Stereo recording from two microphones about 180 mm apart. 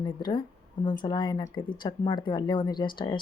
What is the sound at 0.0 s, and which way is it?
Speech, 25° left (ahead or behind).